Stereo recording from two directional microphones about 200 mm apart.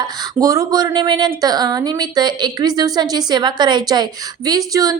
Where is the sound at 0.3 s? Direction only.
15° right (ahead or behind).